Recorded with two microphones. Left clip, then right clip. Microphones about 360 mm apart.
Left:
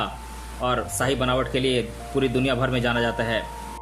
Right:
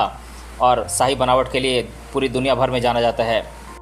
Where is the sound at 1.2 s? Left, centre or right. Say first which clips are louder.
Right 8 dB; right.